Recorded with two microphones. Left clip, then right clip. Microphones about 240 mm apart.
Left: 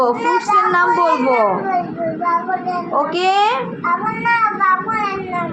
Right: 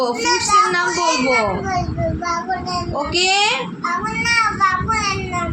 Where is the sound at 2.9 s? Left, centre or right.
Right.